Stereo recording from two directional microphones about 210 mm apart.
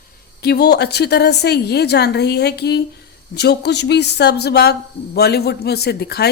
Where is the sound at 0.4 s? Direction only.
50° left (ahead or behind).